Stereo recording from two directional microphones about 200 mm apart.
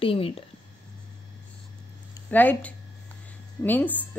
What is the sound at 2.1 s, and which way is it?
A woman's voice, 10° left (ahead or behind).